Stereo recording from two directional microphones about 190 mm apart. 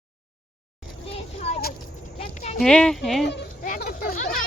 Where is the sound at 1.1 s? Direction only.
35° left (ahead or behind).